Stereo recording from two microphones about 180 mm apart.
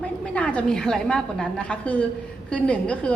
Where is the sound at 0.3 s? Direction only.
5° left (ahead or behind).